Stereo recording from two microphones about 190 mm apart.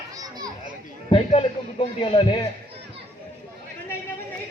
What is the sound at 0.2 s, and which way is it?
Children playing, 20° right (ahead or behind).